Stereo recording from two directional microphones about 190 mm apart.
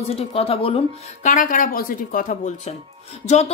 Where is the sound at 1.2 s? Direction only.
45° left (ahead or behind).